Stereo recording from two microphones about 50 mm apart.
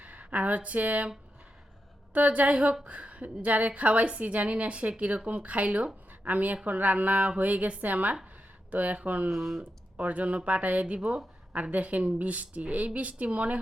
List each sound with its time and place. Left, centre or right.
0.0 s speech: right
2.1 s a woman's voice: right
6.1 s a sound: right
6.7 s a woman's voice: right
9.3 s speech: centre
10.0 s a woman's voice: right